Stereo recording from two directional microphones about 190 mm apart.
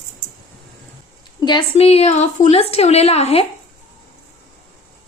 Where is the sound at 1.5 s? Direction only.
30° left (ahead or behind).